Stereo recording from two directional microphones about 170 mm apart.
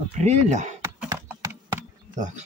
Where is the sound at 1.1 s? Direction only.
15° right (ahead or behind).